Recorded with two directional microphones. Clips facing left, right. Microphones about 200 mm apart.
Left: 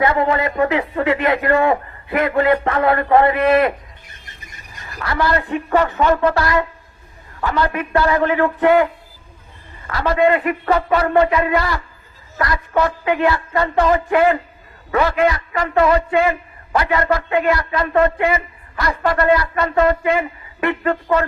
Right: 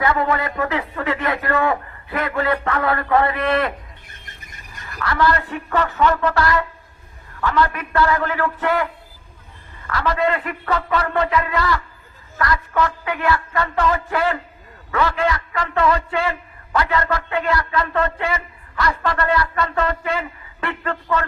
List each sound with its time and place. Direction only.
0.0 s a man's voice: 20° left (ahead or behind)
4.8 s a man's voice: 25° left (ahead or behind)